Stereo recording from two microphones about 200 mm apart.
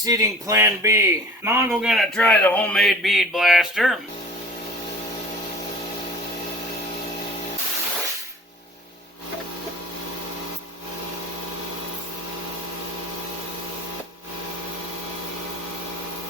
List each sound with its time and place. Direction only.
0.0 s speech: 15° right (ahead or behind)
1.7 s speech: centre (ahead or behind)